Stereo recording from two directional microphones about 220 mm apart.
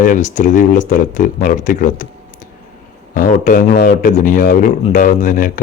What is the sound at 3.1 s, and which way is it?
Speech, 40° left (ahead or behind).